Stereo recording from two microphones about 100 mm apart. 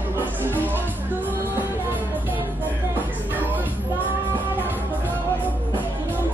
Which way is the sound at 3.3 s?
20° right (ahead or behind).